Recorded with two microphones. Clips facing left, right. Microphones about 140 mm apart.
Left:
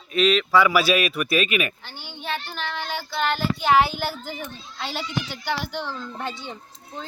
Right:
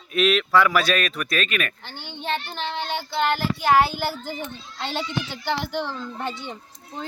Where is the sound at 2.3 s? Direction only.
20° right (ahead or behind).